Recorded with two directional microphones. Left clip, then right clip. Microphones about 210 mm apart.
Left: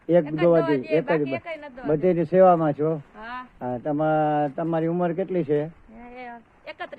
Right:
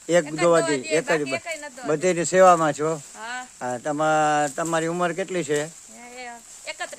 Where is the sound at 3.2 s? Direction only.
15° left (ahead or behind).